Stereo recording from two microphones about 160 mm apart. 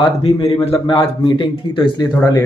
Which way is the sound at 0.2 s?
40° left (ahead or behind).